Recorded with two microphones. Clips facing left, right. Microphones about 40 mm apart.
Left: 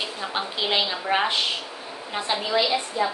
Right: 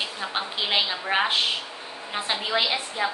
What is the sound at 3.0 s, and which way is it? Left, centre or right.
Speech, right.